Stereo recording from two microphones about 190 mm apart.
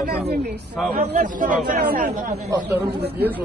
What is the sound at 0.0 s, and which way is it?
Speech, 55° right (ahead or behind).